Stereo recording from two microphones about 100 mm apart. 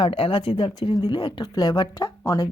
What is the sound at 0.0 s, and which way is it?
Speech, 60° left (ahead or behind).